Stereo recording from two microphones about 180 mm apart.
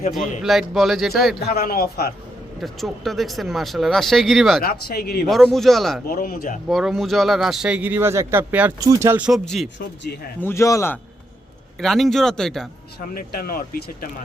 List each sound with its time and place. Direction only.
0.4 s speech: centre (ahead or behind)
1.5 s speech: 55° left (ahead or behind)
2.6 s speech: centre (ahead or behind)
4.6 s speech: 60° left (ahead or behind)
5.3 s speech: centre (ahead or behind)
6.1 s speech: 55° left (ahead or behind)
6.7 s a man's voice: centre (ahead or behind)
10.4 s speech: 15° left (ahead or behind)
11.8 s speech: centre (ahead or behind)
13.1 s speech: 55° left (ahead or behind)